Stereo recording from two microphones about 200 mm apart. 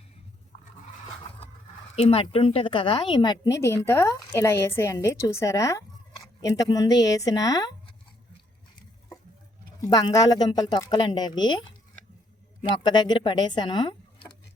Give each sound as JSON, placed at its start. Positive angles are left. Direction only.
{"t": 2.0, "sound": "a woman's voice", "side_deg": 30}
{"t": 9.8, "sound": "speech", "side_deg": 20}
{"t": 12.6, "sound": "speech", "side_deg": 20}